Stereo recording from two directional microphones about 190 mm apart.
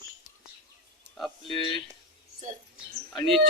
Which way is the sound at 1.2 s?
Centre (ahead or behind).